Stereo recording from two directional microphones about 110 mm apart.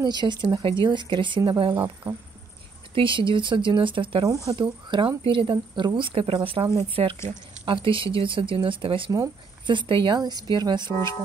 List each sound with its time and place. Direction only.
0.0 s speech: 40° right (ahead or behind)
2.9 s speech: 50° right (ahead or behind)
4.2 s speech: 35° right (ahead or behind)
4.6 s speech: 45° right (ahead or behind)